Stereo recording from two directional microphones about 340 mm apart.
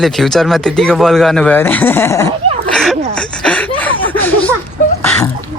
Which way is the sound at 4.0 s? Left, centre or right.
Centre.